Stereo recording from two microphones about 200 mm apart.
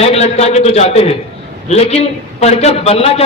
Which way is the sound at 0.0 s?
30° left (ahead or behind).